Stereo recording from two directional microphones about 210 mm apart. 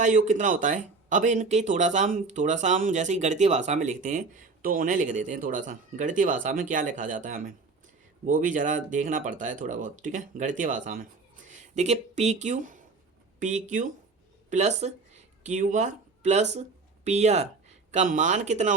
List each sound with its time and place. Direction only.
0.0 s speech: 35° right (ahead or behind)